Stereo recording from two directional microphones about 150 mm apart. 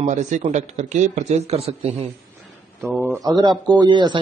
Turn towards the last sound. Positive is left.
turn(degrees=-30)  # may be behind; listen again after turning